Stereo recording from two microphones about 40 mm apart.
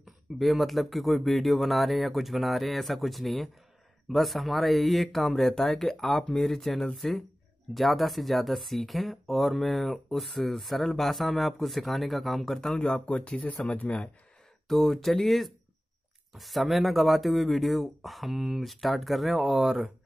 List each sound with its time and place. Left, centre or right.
0.4 s speech: centre
12.5 s speech: left
13.6 s speech: left
14.7 s speech: centre